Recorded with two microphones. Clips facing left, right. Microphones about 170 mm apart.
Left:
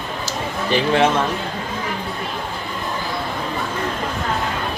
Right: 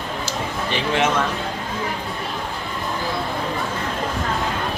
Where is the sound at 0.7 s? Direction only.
35° left (ahead or behind).